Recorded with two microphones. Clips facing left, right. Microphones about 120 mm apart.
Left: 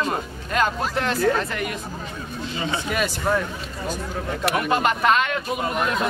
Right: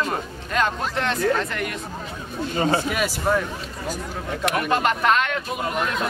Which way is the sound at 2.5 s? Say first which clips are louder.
Right 6 dB; 45° right (ahead or behind).